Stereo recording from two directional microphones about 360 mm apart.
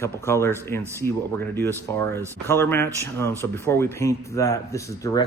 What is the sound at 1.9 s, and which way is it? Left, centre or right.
Speech, centre.